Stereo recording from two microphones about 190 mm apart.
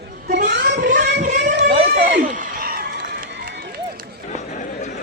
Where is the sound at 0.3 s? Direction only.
50° right (ahead or behind).